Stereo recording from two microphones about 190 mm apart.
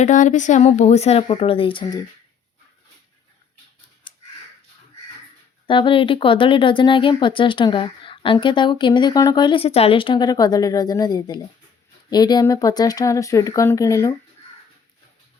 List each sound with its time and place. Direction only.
0.0 s speech: 40° left (ahead or behind); by 2.0 s 25° left (ahead or behind)
4.1 s crow: 25° left (ahead or behind)
5.6 s speech: 25° left (ahead or behind)